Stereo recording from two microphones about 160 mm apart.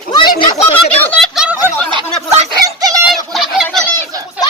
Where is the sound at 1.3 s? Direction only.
5° right (ahead or behind).